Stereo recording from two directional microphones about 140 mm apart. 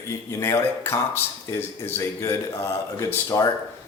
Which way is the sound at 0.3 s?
20° left (ahead or behind).